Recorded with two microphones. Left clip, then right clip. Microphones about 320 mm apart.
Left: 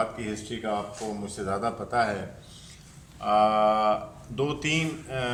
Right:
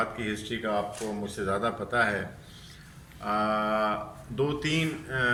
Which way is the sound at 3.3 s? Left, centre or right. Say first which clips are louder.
Left 6 dB; centre.